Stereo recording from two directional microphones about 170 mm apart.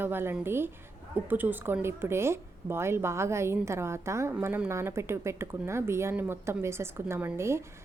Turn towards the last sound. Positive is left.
turn(degrees=-15)  # may be behind; listen again after turning